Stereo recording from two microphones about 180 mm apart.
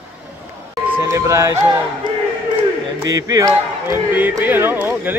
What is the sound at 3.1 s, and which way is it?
Speech, 20° right (ahead or behind).